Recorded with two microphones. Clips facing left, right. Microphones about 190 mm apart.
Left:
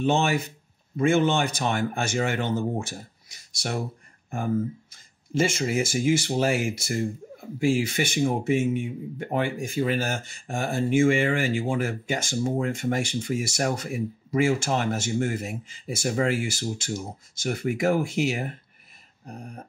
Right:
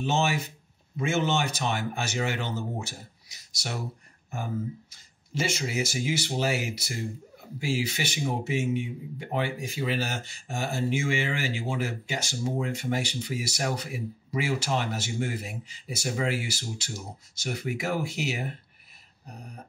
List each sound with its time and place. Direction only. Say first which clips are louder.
0.0 s speech: left 4 dB; 55° left (ahead or behind)